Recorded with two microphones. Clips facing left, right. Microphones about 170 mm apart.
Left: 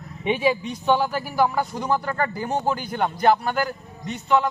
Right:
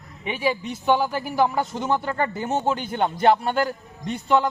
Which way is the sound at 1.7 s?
25° right (ahead or behind).